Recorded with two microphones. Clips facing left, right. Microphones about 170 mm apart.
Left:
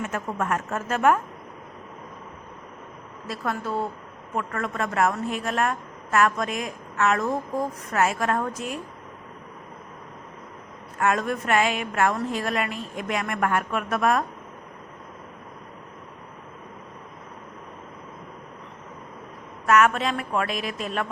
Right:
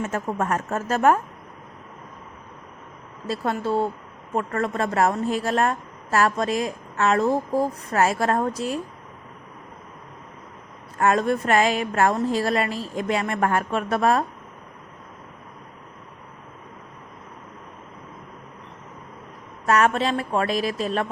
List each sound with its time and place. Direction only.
0.0 s a woman's voice: 35° right (ahead or behind)
3.2 s a woman's voice: 30° right (ahead or behind)
11.0 s a woman's voice: 30° right (ahead or behind)
19.6 s a woman's voice: 30° right (ahead or behind)